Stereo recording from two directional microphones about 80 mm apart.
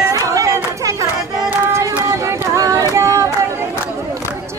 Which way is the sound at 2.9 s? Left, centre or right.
Right.